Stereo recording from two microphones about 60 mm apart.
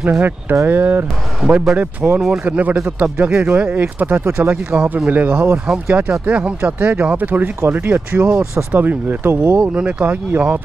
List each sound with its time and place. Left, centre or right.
0.1 s speech: right
1.5 s speech: centre
1.8 s speech: right
8.4 s speech: right
9.6 s speech: right